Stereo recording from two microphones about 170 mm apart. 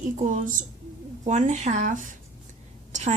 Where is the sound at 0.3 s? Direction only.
50° right (ahead or behind).